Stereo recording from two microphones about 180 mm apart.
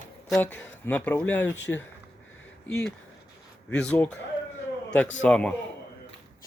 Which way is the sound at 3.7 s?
5° left (ahead or behind).